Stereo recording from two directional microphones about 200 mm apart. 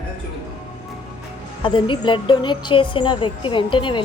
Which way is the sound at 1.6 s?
25° left (ahead or behind).